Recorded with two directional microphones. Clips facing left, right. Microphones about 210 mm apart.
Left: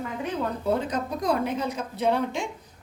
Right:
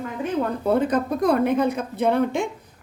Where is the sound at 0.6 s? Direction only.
55° right (ahead or behind).